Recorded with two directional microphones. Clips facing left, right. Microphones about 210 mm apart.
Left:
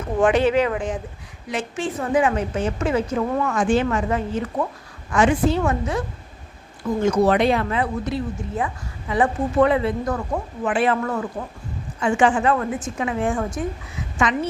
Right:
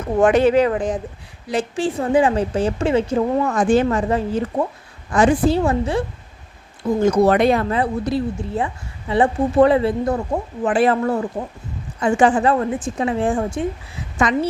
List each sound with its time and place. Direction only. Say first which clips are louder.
0.2 s a woman's voice: right 4 dB; 40° right (ahead or behind)
14.3 s a woman's voice: right 4 dB; 40° right (ahead or behind)